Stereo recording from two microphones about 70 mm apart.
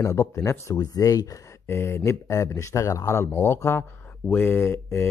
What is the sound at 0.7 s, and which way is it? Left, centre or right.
Speech, left.